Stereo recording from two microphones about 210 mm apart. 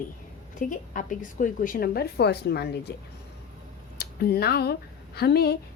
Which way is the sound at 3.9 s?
45° left (ahead or behind).